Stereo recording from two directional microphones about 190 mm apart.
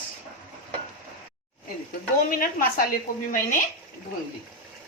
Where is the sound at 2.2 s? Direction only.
50° left (ahead or behind).